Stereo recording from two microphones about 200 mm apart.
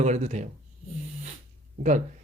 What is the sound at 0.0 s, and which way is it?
Speech, 35° right (ahead or behind).